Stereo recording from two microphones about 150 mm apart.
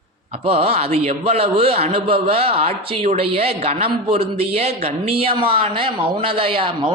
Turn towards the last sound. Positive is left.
turn(degrees=-35)  # may be behind; listen again after turning